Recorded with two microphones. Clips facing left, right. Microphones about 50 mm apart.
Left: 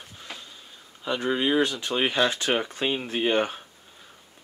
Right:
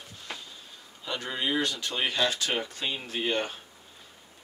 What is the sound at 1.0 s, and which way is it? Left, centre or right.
Speech, centre.